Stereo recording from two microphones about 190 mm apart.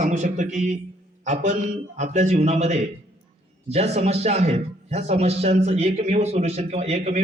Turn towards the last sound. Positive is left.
turn(degrees=-35)  # may be behind; listen again after turning